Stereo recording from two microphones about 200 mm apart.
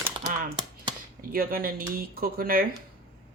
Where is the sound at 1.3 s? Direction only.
45° right (ahead or behind).